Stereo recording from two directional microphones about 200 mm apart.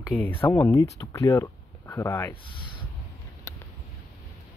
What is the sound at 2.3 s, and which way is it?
Speech, 25° left (ahead or behind).